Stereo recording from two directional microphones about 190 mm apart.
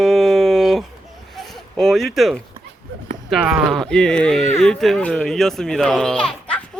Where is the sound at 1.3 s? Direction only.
Centre (ahead or behind).